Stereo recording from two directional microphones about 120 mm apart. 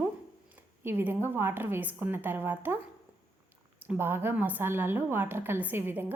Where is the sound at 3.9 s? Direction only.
20° right (ahead or behind).